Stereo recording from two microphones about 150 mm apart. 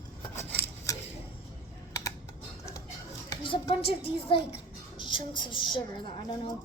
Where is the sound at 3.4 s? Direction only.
35° left (ahead or behind).